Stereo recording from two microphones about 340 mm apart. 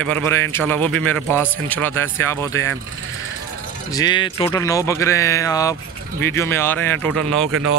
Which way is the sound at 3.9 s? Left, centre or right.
Centre.